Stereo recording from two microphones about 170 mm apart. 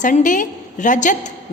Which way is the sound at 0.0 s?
50° left (ahead or behind).